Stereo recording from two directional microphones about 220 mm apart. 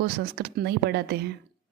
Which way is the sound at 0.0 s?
50° right (ahead or behind).